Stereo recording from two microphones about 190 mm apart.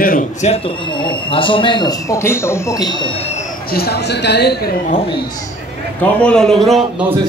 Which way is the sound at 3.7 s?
55° left (ahead or behind).